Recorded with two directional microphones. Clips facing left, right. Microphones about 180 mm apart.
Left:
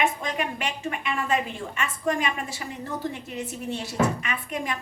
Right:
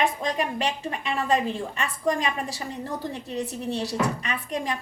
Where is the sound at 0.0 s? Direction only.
35° right (ahead or behind).